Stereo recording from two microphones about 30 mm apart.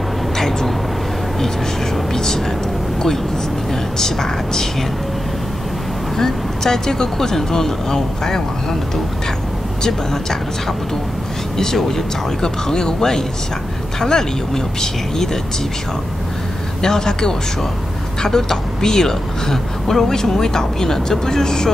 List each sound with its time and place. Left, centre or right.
0.4 s vehicle: centre
2.1 s speech: centre
4.0 s speech: centre
6.1 s speech: centre
11.5 s speech: centre
16.8 s a man's voice: centre